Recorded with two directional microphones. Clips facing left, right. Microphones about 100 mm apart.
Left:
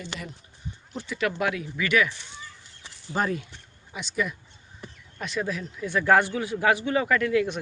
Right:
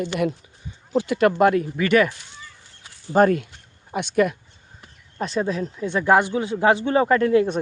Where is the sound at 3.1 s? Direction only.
55° right (ahead or behind).